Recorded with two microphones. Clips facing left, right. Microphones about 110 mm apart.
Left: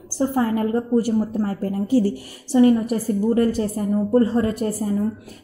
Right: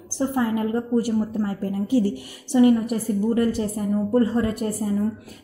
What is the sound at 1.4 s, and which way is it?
A woman's voice, 40° left (ahead or behind).